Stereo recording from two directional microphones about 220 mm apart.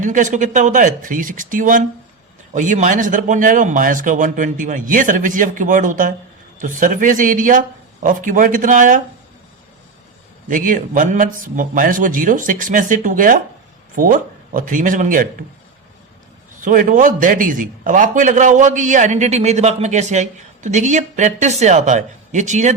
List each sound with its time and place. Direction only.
0.0 s a man's voice: 35° right (ahead or behind)
10.5 s a man's voice: 40° right (ahead or behind)
16.6 s a man's voice: 35° right (ahead or behind)